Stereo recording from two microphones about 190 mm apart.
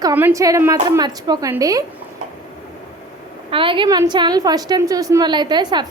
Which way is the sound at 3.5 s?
25° right (ahead or behind).